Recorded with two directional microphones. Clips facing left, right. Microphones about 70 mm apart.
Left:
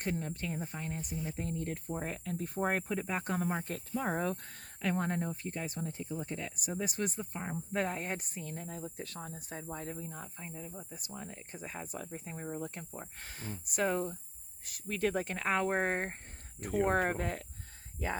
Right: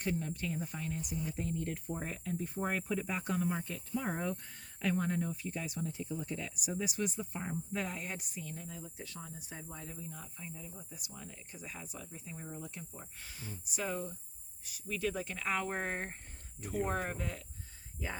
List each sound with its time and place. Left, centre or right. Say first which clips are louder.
0.0 s speech: even; left
16.6 s speech: left 6 dB; left